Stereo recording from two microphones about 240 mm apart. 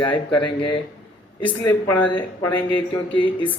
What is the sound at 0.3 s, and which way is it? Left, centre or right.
Speech, centre.